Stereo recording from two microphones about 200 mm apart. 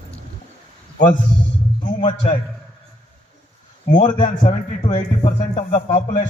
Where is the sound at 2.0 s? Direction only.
25° left (ahead or behind).